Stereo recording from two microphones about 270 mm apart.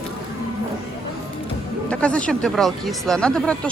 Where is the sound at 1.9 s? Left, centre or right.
Centre.